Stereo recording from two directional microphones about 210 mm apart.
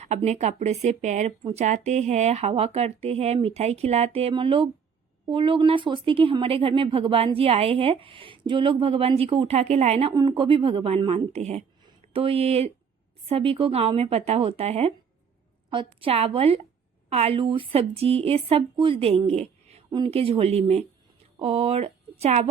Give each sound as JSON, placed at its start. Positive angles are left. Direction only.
{"t": 0.0, "sound": "speech", "side_deg": -30}
{"t": 10.1, "sound": "speech", "side_deg": -20}